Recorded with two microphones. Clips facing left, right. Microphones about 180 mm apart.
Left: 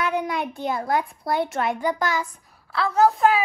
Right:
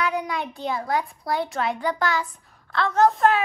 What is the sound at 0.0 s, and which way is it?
A child's voice, centre (ahead or behind).